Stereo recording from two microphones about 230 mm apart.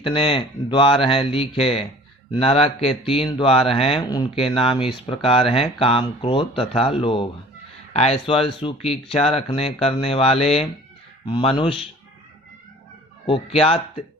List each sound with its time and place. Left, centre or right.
0.1 s speech: left
13.2 s speech: left